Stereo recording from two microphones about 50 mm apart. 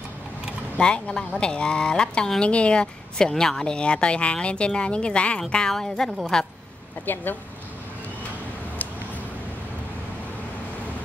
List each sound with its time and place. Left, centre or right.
0.7 s speech: centre
5.7 s speech: centre
7.1 s speech: left